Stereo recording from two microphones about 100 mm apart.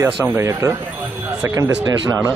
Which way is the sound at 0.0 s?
25° right (ahead or behind).